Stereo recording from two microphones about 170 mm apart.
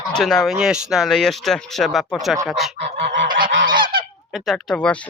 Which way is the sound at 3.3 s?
55° right (ahead or behind).